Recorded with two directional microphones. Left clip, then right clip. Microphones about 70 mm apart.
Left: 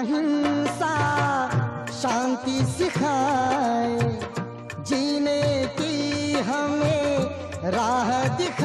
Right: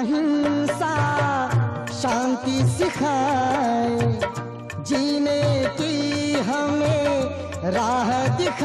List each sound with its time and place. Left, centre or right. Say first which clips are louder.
0.0 s music: right 2 dB; right